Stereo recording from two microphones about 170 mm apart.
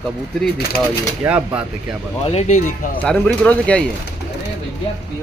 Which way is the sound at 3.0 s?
5° left (ahead or behind).